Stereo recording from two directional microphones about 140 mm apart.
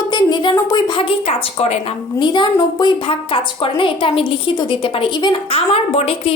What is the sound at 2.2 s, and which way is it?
A woman's voice, 35° left (ahead or behind).